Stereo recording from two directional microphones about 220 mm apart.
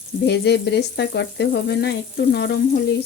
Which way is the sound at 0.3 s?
50° left (ahead or behind).